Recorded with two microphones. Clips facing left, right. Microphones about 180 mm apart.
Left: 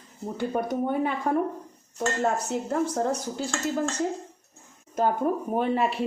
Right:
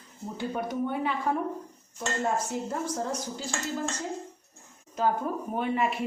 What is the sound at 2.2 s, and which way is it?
A woman's voice, 65° left (ahead or behind).